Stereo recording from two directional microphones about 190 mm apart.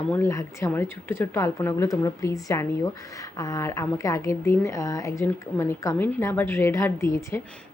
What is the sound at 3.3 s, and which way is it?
Speech, 20° left (ahead or behind).